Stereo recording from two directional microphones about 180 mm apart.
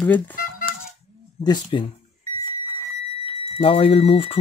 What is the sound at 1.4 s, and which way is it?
Speech, 25° left (ahead or behind).